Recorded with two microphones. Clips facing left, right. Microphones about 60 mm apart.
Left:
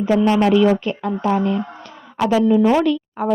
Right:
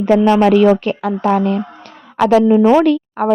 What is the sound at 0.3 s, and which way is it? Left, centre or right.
A woman's voice, right.